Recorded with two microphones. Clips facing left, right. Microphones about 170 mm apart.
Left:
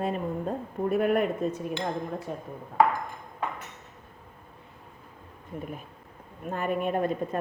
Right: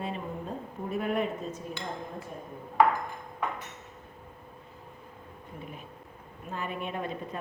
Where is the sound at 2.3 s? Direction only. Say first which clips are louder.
Left 6 dB; 80° left.